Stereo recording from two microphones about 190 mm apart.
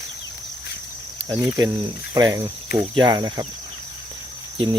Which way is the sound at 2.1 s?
20° right (ahead or behind).